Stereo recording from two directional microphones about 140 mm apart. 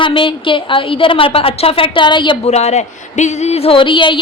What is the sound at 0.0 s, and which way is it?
A woman's voice, 35° left (ahead or behind).